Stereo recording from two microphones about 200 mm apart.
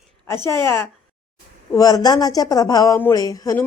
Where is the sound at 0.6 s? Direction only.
10° left (ahead or behind).